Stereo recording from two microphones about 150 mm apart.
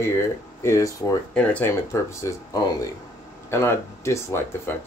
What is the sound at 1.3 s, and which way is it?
Speech, 10° left (ahead or behind).